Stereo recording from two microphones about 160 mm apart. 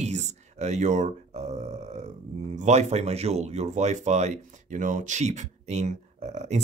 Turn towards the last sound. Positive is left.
turn(degrees=-45)  # may be behind; listen again after turning